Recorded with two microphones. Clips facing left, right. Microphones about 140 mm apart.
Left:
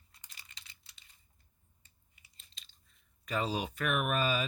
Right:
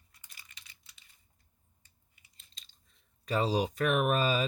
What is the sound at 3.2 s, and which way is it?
Speech, 35° right (ahead or behind).